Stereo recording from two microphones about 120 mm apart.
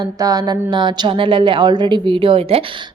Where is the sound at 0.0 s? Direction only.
30° right (ahead or behind).